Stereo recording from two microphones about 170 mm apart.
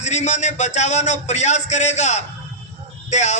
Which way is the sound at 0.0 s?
45° left (ahead or behind).